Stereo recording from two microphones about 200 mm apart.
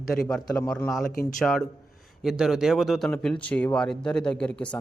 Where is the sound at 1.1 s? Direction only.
45° left (ahead or behind).